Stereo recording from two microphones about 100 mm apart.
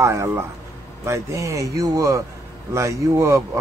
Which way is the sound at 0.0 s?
30° right (ahead or behind).